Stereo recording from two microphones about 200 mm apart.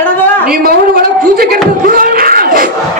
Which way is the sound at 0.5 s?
50° right (ahead or behind).